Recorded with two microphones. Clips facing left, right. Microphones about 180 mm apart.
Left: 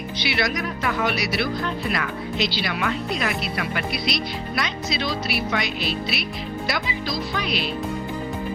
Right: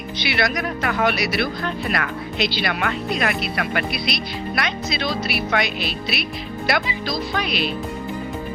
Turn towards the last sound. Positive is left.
turn(degrees=-60)  # may be behind; listen again after turning